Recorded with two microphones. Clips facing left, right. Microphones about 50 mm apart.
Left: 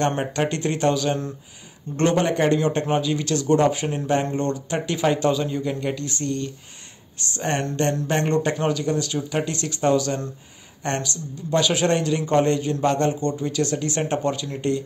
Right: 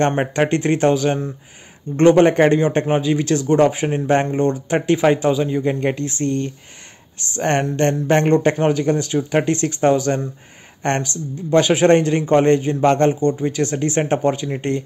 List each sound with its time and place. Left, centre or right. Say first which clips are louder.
0.2 s speech: right 5 dB; right
5.6 s speech: right 6 dB; right
13.2 s speech: right 5 dB; right